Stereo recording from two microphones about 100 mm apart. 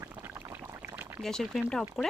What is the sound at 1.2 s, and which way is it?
Speech, 5° left (ahead or behind).